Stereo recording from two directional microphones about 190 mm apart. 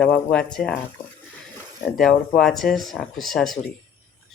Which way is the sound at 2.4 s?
Centre (ahead or behind).